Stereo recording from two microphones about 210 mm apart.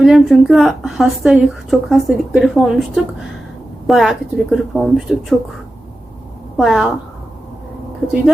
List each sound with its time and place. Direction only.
0.0 s speech: centre (ahead or behind)
6.6 s speech: centre (ahead or behind)